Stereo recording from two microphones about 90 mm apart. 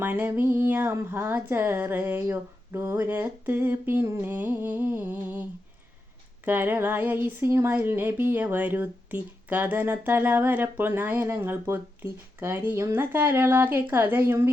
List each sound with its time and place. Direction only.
0.0 s speech: 20° right (ahead or behind)